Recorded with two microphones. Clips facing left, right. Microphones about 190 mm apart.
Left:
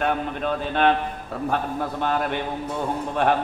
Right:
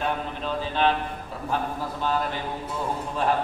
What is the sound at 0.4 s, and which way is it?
A man's voice, 60° left (ahead or behind).